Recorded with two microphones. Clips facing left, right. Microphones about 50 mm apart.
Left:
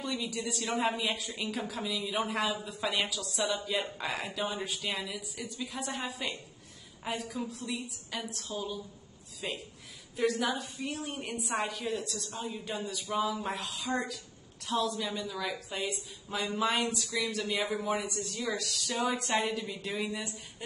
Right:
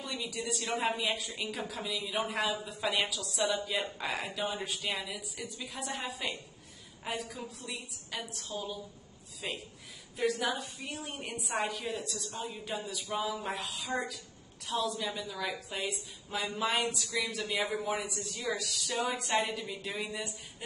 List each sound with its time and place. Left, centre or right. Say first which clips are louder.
0.0 s a woman's voice: left 3 dB; centre
12.4 s a woman's voice: left 2 dB; right
12.6 s a woman's voice: left 1 dB; centre